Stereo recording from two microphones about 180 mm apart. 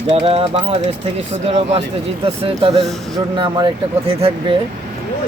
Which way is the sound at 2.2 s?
30° right (ahead or behind).